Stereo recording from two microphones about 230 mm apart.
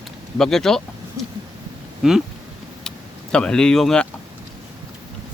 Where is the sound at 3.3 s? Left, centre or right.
Centre.